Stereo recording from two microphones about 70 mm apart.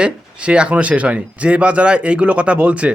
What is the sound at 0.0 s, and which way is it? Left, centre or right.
Speech, centre.